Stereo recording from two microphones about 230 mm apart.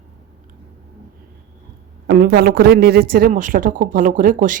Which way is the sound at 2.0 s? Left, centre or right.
Right.